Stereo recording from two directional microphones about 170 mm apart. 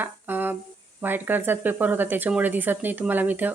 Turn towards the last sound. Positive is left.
turn(degrees=-10)  # may be behind; listen again after turning